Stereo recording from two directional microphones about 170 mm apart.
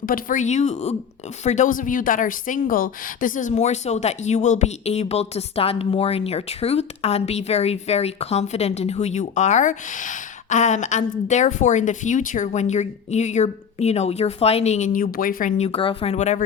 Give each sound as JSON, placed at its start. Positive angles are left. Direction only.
{"t": 0.0, "sound": "speech", "side_deg": 55}